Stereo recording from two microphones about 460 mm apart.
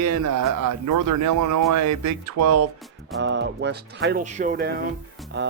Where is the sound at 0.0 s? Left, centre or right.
Right.